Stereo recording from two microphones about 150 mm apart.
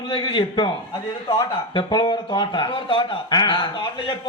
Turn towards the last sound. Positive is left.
turn(degrees=30)  # may be behind; listen again after turning